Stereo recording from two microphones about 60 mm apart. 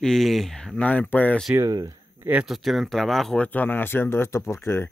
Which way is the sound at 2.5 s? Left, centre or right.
Centre.